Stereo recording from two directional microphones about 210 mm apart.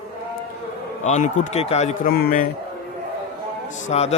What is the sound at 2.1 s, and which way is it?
Speech, 45° left (ahead or behind).